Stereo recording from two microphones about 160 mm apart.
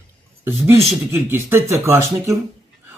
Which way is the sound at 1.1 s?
15° right (ahead or behind).